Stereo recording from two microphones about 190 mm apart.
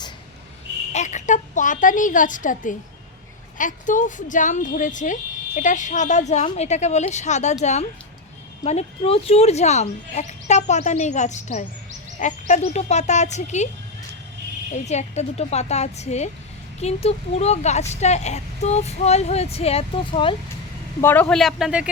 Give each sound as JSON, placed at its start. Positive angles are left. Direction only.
{"t": 0.9, "sound": "a woman's voice", "side_deg": 40}
{"t": 14.8, "sound": "speech", "side_deg": 35}
{"t": 21.0, "sound": "speech", "side_deg": 10}